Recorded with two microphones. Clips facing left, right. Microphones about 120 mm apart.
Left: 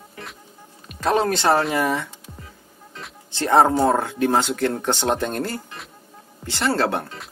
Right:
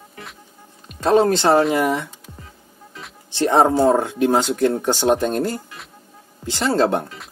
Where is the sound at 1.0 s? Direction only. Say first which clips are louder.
Right 4 dB; 25° right (ahead or behind).